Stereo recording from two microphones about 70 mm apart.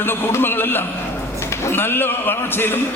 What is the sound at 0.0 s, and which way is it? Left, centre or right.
A man's voice, left.